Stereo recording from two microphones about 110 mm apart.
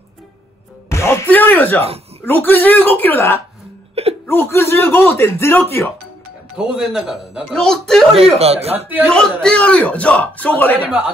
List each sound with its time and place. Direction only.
0.8 s music: 25° left (ahead or behind)
1.3 s a man's voice: 15° left (ahead or behind)
3.9 s wail: 65° right (ahead or behind)
4.3 s speech: 20° left (ahead or behind)
6.5 s speech: 5° right (ahead or behind)
8.4 s a man's voice: 70° right (ahead or behind)
9.0 s a man's voice: 10° left (ahead or behind)